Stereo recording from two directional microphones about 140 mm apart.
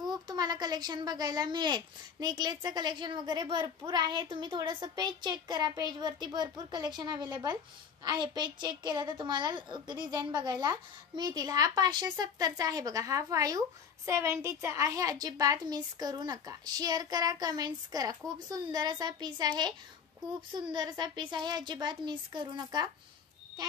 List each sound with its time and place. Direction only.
0.1 s a woman's voice: 30° right (ahead or behind)
20.7 s speech: 30° right (ahead or behind)